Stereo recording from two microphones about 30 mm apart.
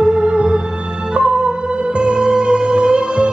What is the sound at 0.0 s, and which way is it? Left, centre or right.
Music, right.